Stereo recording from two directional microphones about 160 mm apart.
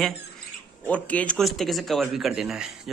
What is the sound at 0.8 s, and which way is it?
Speech, 10° left (ahead or behind).